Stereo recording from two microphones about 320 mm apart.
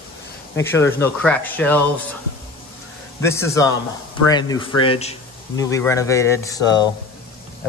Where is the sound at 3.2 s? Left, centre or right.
Centre.